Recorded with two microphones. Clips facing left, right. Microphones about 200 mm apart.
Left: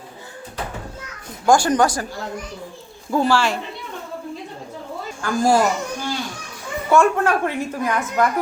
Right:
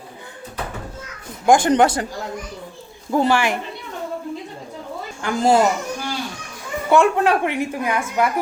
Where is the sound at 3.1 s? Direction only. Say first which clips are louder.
Right 1 dB; 20° right (ahead or behind).